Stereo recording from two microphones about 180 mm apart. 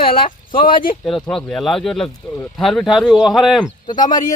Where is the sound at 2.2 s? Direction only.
15° left (ahead or behind).